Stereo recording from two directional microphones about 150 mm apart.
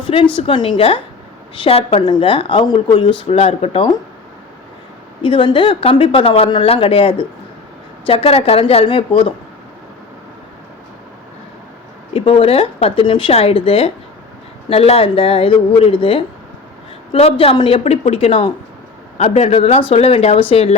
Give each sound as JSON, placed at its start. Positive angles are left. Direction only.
{"t": 0.3, "sound": "speech", "side_deg": 35}
{"t": 3.2, "sound": "speech", "side_deg": 45}
{"t": 5.2, "sound": "speech", "side_deg": 30}
{"t": 12.1, "sound": "speech", "side_deg": 40}